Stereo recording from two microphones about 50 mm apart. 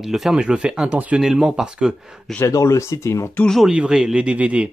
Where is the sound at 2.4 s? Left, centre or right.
Left.